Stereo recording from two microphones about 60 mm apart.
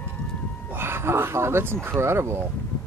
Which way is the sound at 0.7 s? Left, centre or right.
Right.